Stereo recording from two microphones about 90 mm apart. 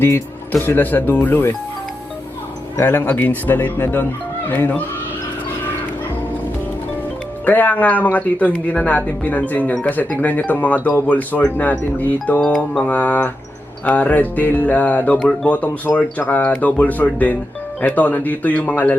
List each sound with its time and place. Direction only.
0.0 s speech: 25° left (ahead or behind)
2.7 s speech: 25° left (ahead or behind)
7.4 s speech: 20° left (ahead or behind)